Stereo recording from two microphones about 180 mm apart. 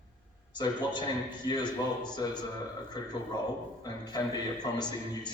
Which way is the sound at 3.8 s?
20° left (ahead or behind).